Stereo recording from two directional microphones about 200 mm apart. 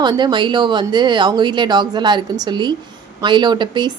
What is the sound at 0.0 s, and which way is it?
Speech, 20° right (ahead or behind).